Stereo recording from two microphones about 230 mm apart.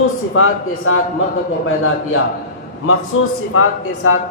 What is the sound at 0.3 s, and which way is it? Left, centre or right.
Speech, left.